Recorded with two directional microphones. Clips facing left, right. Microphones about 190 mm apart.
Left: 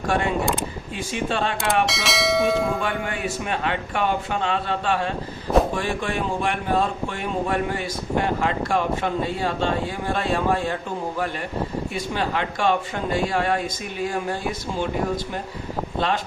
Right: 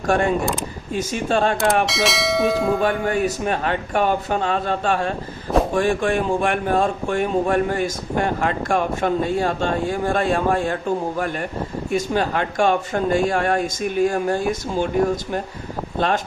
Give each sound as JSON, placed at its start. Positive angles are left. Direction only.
{"t": 0.0, "sound": "speech", "side_deg": -45}
{"t": 1.9, "sound": "speech", "side_deg": 0}
{"t": 2.8, "sound": "speech", "side_deg": -40}
{"t": 11.9, "sound": "speech", "side_deg": -45}